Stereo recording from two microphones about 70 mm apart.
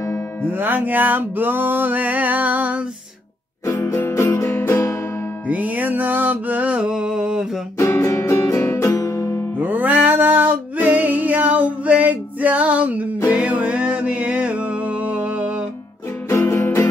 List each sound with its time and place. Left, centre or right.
0.5 s music: right
3.8 s music: left
5.5 s music: right
6.9 s a sound: centre
7.7 s music: left
8.8 s music: left
9.6 s a sound: right
13.3 s music: centre
16.3 s music: left